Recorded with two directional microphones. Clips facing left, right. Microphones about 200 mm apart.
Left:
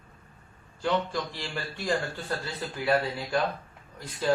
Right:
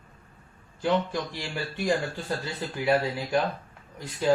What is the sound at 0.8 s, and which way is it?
A man's voice, 20° right (ahead or behind).